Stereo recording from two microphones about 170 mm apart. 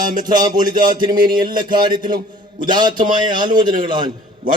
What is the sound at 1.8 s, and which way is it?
A man's voice, 25° right (ahead or behind).